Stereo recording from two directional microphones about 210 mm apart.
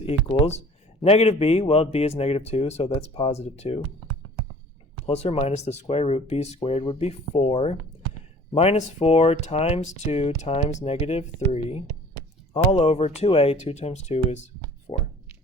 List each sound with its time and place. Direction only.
0.0 s speech: 30° left (ahead or behind)
5.0 s speech: 30° left (ahead or behind)
12.7 s speech: 30° left (ahead or behind)
14.9 s a sound: 35° left (ahead or behind)